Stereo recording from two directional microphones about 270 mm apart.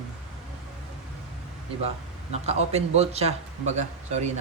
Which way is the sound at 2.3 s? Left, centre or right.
Right.